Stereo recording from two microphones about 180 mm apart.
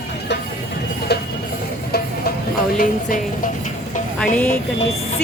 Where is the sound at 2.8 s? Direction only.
45° left (ahead or behind).